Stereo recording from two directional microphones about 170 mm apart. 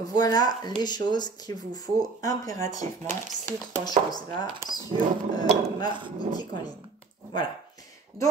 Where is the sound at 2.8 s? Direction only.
45° right (ahead or behind).